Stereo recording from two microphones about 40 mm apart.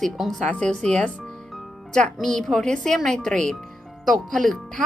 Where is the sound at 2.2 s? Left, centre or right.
Centre.